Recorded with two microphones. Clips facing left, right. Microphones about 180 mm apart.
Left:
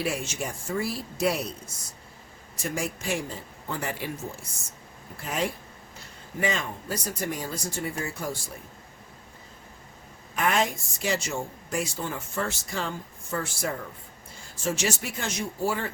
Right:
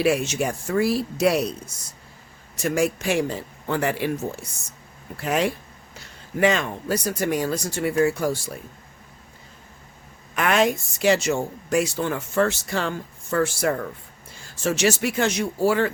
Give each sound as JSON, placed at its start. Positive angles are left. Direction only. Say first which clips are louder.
{"t": 0.0, "sound": "a woman's voice", "louder": "right 9 dB", "side_deg": -75}
{"t": 5.1, "sound": "a woman's voice", "louder": "right 7 dB", "side_deg": -75}
{"t": 10.3, "sound": "a woman's voice", "louder": "right 5 dB", "side_deg": -75}